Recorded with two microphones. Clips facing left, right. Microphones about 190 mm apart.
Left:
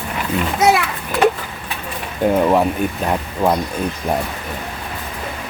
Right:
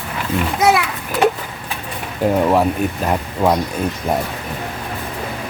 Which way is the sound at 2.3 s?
Centre (ahead or behind).